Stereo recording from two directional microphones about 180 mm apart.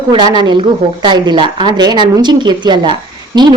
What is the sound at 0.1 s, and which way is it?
A woman's voice, 25° right (ahead or behind).